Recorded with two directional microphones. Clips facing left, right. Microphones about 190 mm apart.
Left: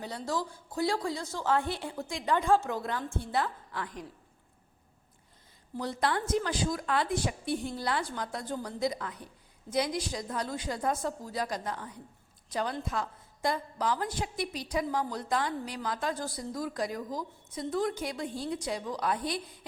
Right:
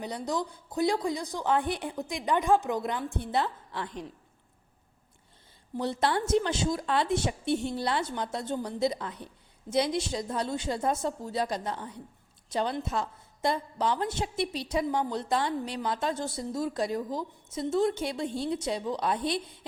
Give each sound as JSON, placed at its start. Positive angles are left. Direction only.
{"t": 0.0, "sound": "a woman's voice", "side_deg": -20}
{"t": 5.7, "sound": "a woman's voice", "side_deg": -25}